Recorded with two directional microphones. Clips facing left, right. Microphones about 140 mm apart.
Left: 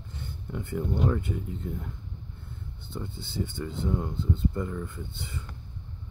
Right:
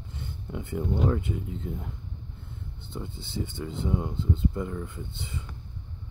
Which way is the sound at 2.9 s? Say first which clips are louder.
Even; 20° right (ahead or behind).